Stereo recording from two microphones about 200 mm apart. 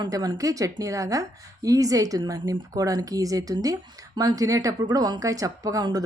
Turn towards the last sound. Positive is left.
turn(degrees=-20)  # may be behind; listen again after turning